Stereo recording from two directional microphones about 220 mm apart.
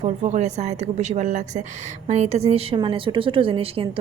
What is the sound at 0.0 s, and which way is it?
A woman's voice, 30° right (ahead or behind).